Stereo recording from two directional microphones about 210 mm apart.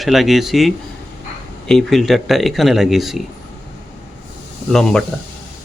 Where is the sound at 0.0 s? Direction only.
Centre (ahead or behind).